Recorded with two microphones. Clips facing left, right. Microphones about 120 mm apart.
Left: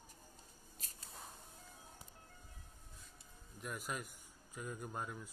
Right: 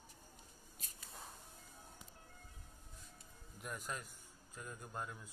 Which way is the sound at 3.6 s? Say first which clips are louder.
Left 2 dB; 5° left (ahead or behind).